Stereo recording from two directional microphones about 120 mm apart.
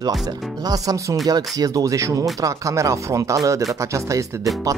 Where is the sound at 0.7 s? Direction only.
25° right (ahead or behind).